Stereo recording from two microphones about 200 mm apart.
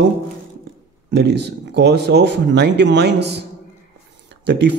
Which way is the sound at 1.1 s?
55° right (ahead or behind).